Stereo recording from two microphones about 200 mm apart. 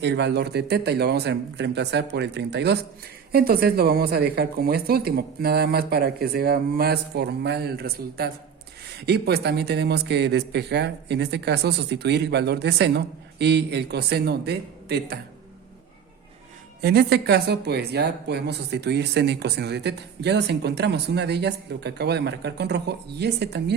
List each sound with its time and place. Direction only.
0.0 s a woman's voice: 60° right (ahead or behind)
16.8 s speech: 50° right (ahead or behind)